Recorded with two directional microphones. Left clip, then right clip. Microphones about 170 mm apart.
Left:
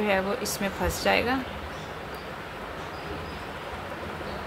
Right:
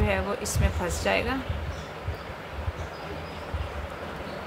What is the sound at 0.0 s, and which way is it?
A woman's voice, 5° left (ahead or behind).